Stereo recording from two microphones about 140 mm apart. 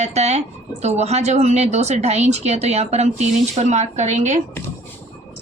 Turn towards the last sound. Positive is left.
turn(degrees=-55)  # may be behind; listen again after turning